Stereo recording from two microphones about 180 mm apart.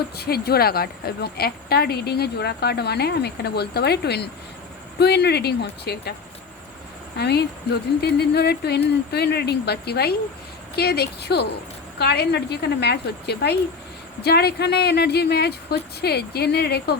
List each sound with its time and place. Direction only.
0.2 s a woman's voice: 60° left (ahead or behind)
7.2 s a woman's voice: 65° left (ahead or behind)